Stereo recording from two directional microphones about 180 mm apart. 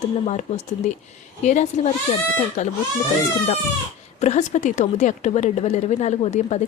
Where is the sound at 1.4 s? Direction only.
40° left (ahead or behind).